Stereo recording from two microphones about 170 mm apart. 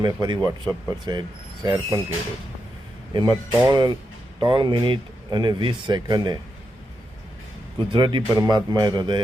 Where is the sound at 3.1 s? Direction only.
25° right (ahead or behind).